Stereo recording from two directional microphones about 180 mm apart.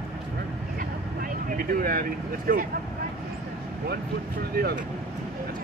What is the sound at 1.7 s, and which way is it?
Speech, 55° right (ahead or behind).